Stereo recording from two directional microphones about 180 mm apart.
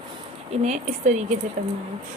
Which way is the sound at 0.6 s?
40° right (ahead or behind).